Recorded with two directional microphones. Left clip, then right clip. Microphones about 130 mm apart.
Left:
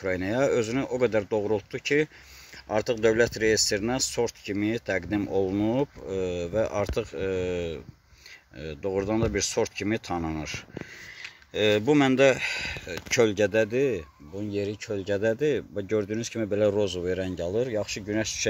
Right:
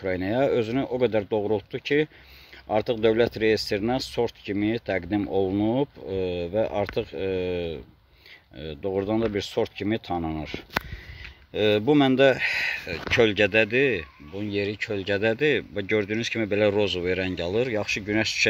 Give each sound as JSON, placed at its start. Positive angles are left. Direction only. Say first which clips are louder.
{"t": 0.0, "sound": "speech", "louder": "right 1 dB", "side_deg": -5}
{"t": 11.5, "sound": "speech", "louder": "right 1 dB", "side_deg": -20}
{"t": 13.1, "sound": "speech", "louder": "right 2 dB", "side_deg": 5}